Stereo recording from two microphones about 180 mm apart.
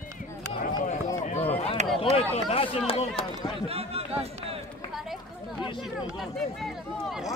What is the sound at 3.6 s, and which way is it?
Speech, 35° right (ahead or behind).